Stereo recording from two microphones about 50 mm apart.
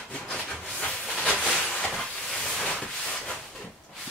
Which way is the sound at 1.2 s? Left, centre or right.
Left.